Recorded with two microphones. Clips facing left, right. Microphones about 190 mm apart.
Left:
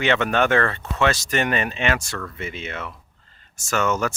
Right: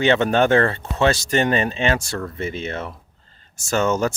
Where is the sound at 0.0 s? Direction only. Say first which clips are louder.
Right 3 dB; 30° right (ahead or behind).